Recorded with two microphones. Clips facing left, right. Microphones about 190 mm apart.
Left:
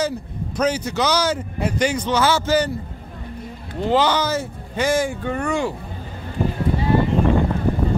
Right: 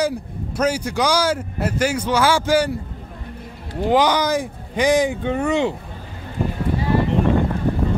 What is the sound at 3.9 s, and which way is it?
Speech, 15° right (ahead or behind).